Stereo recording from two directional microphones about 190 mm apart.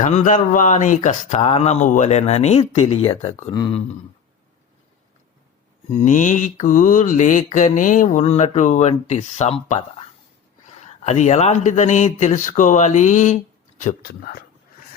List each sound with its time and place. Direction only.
0.0 s mantra: 40° left (ahead or behind)
6.0 s mantra: 40° left (ahead or behind)